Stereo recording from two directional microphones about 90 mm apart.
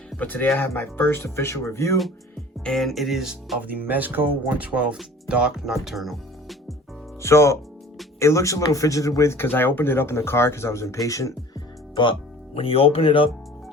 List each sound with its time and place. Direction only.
0.2 s speech: 20° left (ahead or behind)
2.6 s speech: 5° left (ahead or behind)
3.6 s speech: 20° right (ahead or behind); by 6.7 s centre (ahead or behind)
7.2 s speech: 30° left (ahead or behind)
12.5 s speech: 90° left